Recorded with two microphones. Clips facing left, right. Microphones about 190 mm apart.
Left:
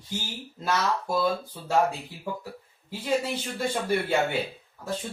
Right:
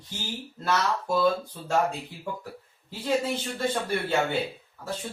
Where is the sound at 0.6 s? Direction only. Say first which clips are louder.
Even; 10° left (ahead or behind).